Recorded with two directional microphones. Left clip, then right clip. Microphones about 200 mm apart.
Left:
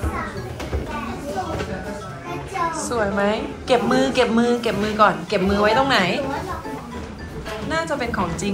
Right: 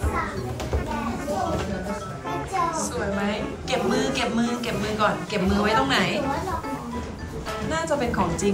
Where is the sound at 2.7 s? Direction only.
Centre (ahead or behind).